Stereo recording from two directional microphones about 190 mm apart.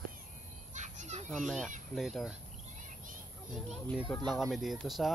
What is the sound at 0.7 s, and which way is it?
Children playing, 40° right (ahead or behind).